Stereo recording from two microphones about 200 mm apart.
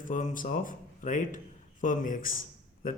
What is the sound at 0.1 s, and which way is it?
Speech, 40° left (ahead or behind).